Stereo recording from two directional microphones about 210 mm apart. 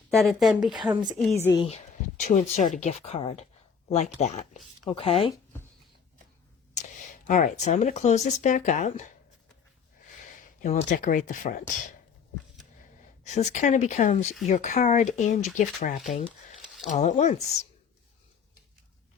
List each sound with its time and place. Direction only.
0.1 s speech: centre (ahead or behind)
1.5 s speech: 30° left (ahead or behind)
6.7 s speech: 35° left (ahead or behind)
10.6 s speech: 35° left (ahead or behind)
13.2 s speech: 35° left (ahead or behind)